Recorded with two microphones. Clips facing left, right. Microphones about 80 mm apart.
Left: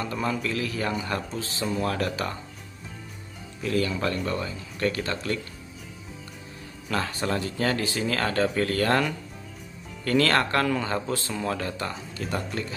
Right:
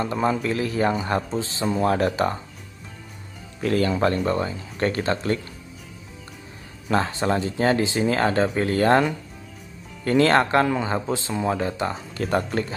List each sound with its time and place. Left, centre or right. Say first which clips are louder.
0.0 s speech: right 5 dB; right
3.6 s speech: right 5 dB; right
6.9 s speech: right 5 dB; right
11.9 s speech: right 7 dB; right